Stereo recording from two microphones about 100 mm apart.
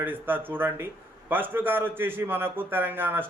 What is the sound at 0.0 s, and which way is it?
A man's voice, 20° right (ahead or behind).